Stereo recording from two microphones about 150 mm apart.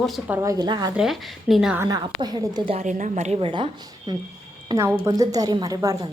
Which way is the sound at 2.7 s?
50° right (ahead or behind).